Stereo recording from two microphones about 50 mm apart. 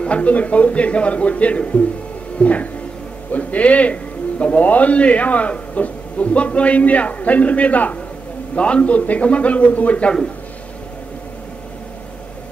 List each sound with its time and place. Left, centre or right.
0.0 s a man's voice: left